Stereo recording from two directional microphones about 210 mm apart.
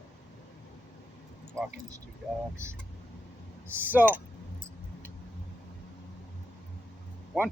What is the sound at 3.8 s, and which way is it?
Speech, 10° right (ahead or behind).